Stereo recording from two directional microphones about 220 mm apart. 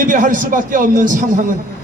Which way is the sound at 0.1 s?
35° right (ahead or behind).